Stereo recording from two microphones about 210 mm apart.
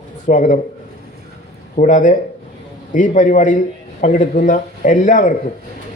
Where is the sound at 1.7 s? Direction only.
35° left (ahead or behind).